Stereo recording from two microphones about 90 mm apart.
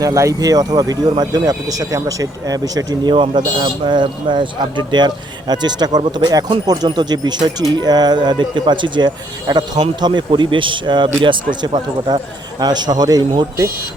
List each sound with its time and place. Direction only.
0.0 s speech: 35° right (ahead or behind)
3.1 s speech: 60° right (ahead or behind)